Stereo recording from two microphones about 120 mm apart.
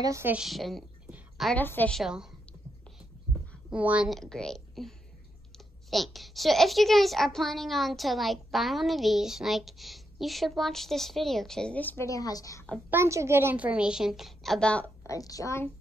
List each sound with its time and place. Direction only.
0.0 s a woman's voice: 25° right (ahead or behind)
0.3 s a woman's voice: 5° right (ahead or behind)
1.6 s a woman's voice: 15° left (ahead or behind)
2.0 s a woman's voice: 5° right (ahead or behind)
3.7 s a woman's voice: 10° right (ahead or behind)
4.1 s a woman's voice: 5° left (ahead or behind)
12.1 s a woman's voice: 30° left (ahead or behind)
12.9 s a woman's voice: 25° right (ahead or behind); by 14.9 s 10° left (ahead or behind)
15.0 s a woman's voice: 30° left (ahead or behind)